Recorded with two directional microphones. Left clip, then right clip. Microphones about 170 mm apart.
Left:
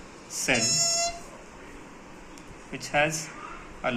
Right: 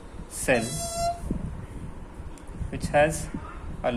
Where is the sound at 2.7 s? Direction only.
65° right (ahead or behind).